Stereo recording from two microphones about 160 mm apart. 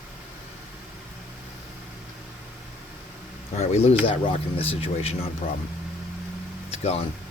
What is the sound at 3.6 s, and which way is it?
Speech, 40° left (ahead or behind).